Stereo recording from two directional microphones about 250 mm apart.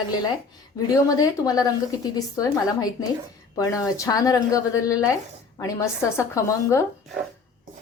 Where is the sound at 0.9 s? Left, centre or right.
Centre.